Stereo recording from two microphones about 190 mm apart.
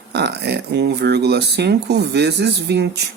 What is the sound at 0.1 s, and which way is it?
Speech, 60° right (ahead or behind).